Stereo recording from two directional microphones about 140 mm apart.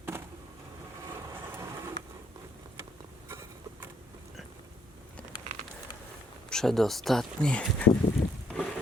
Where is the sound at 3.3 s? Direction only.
20° right (ahead or behind).